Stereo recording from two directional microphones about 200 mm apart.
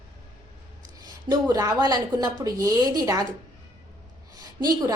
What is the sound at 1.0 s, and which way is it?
A woman's voice, 20° right (ahead or behind).